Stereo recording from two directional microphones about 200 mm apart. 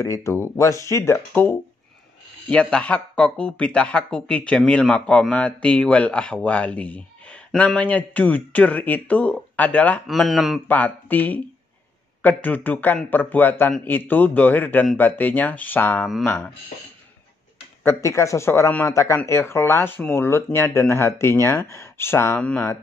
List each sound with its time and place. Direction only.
0.0 s a man's voice: 15° left (ahead or behind)
17.8 s a man's voice: 15° left (ahead or behind)